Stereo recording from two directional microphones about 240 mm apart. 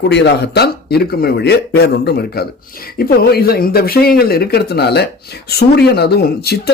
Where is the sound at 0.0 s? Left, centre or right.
Left.